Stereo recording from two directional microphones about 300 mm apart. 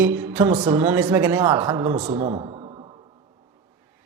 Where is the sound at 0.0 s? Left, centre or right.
Centre.